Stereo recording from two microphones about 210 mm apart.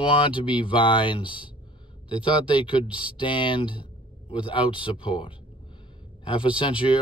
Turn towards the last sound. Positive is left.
turn(degrees=25)  # may be behind; listen again after turning